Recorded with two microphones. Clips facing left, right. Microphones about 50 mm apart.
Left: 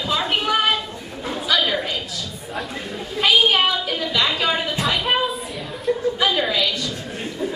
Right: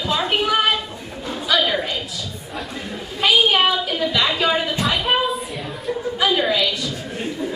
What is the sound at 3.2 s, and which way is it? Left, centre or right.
Music, centre.